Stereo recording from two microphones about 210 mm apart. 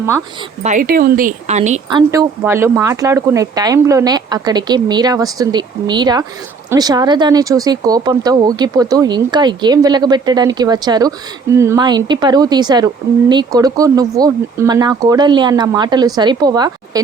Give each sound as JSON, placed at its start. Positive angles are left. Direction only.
{"t": 0.6, "sound": "speech", "side_deg": -40}
{"t": 2.0, "sound": "speech", "side_deg": -10}